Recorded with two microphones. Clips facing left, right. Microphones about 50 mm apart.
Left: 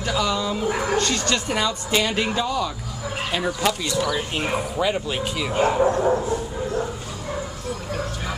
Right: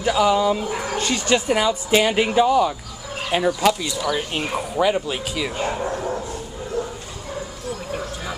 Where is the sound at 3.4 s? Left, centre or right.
Centre.